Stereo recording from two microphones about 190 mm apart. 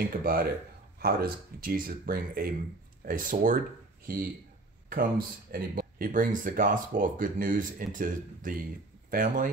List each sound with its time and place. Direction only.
0.0 s speech: 55° right (ahead or behind)
4.8 s speech: 50° right (ahead or behind)